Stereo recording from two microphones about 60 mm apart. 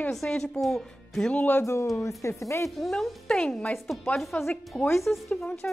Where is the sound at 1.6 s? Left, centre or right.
Left.